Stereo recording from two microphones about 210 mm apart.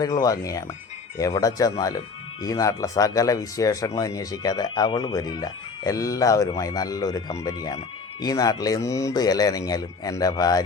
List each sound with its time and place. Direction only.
0.0 s speech: 20° left (ahead or behind)